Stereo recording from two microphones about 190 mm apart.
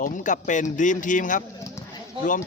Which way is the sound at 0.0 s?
45° left (ahead or behind).